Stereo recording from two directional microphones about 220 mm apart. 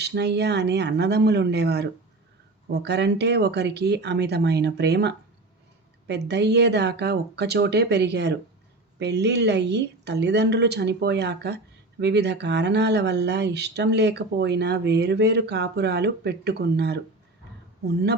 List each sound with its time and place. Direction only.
0.0 s a woman's voice: 50° right (ahead or behind)